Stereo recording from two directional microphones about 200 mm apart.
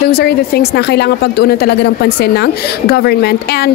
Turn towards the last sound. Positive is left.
turn(degrees=55)  # may be behind; listen again after turning